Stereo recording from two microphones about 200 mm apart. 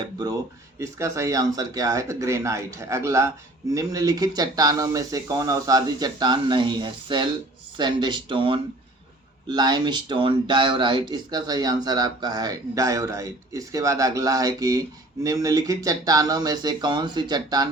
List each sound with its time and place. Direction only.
0.8 s speech: 15° right (ahead or behind)